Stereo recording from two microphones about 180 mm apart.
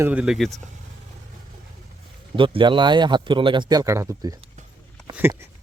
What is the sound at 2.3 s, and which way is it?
Speech, 30° right (ahead or behind).